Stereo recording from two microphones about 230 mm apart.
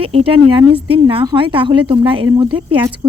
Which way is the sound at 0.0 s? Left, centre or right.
Right.